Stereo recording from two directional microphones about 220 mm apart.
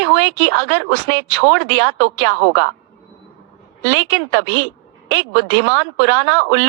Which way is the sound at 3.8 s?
65° right (ahead or behind).